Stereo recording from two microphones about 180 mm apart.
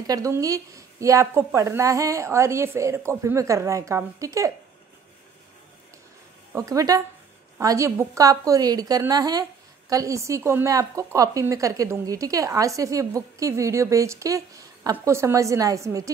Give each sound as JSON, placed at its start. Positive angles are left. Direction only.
{"t": 0.0, "sound": "a woman's voice", "side_deg": -20}
{"t": 6.5, "sound": "a woman's voice", "side_deg": -20}